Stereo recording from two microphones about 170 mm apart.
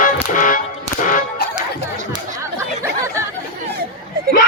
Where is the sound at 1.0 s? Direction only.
50° left (ahead or behind).